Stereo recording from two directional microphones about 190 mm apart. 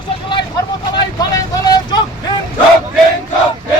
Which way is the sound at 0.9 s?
20° left (ahead or behind).